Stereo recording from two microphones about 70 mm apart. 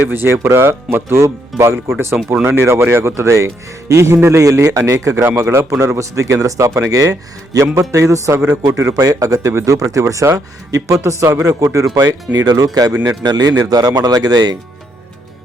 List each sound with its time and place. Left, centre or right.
0.1 s speech: right
11.9 s a man's voice: right